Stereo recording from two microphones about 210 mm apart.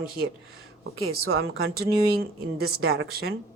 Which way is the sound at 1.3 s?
70° right (ahead or behind).